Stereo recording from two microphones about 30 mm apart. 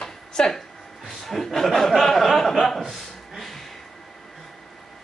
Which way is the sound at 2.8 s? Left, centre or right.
Centre.